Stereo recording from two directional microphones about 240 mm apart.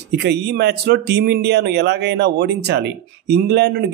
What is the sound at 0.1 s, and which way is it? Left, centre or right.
Speech, right.